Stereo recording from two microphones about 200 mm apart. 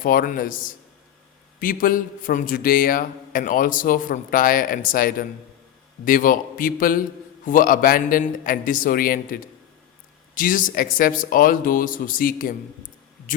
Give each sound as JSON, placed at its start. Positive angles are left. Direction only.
{"t": 0.0, "sound": "speech", "side_deg": 45}